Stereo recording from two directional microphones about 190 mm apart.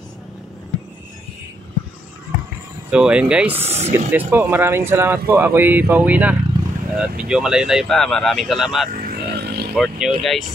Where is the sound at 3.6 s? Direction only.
35° right (ahead or behind).